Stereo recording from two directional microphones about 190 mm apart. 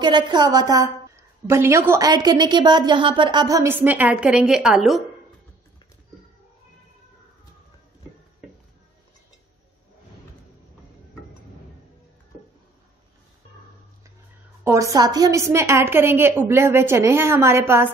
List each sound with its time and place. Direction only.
0.0 s a woman's voice: 20° right (ahead or behind); by 5.0 s centre (ahead or behind)
14.6 s a woman's voice: 15° right (ahead or behind)